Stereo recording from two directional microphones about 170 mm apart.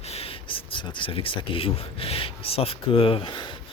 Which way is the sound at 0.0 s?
35° left (ahead or behind).